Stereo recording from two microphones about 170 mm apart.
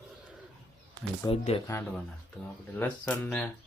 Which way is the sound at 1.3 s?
35° left (ahead or behind).